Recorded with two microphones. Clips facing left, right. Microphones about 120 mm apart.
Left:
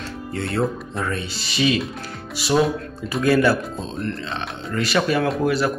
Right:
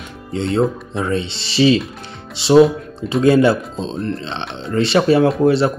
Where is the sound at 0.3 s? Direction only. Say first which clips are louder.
Right 6 dB; 20° right (ahead or behind).